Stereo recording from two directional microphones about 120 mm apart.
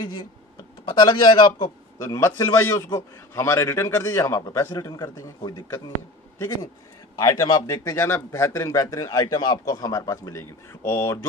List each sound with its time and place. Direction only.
0.0 s a man's voice: 35° left (ahead or behind)
2.0 s a man's voice: 25° left (ahead or behind)
7.2 s a man's voice: 30° left (ahead or behind)